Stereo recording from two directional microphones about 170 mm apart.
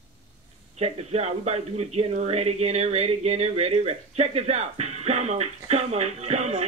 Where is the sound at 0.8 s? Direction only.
40° right (ahead or behind).